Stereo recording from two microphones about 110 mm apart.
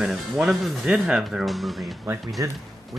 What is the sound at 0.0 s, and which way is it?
Speech, 5° right (ahead or behind).